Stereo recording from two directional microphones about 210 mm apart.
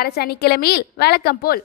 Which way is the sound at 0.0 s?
50° left (ahead or behind).